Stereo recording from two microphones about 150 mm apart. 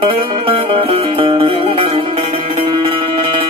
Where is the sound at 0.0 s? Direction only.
40° right (ahead or behind).